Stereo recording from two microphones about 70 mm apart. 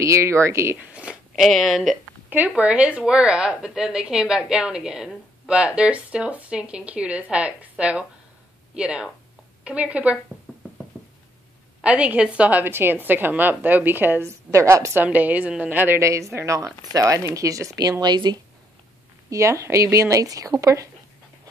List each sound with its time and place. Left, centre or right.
0.0 s speech: right
0.7 s zipper: centre
1.3 s speech: centre
2.2 s a woman's voice: right
11.8 s a woman's voice: centre
14.5 s speech: right
15.0 s a woman's voice: right
16.0 s speech: right
18.0 s speech: right
19.3 s speech: right